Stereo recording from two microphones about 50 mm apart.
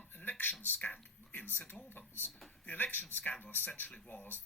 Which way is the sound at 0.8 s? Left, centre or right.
Left.